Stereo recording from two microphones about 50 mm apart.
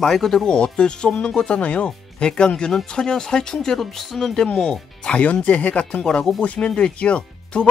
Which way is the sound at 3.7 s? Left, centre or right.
Centre.